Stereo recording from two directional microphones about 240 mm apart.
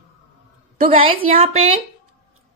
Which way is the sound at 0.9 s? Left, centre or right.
Right.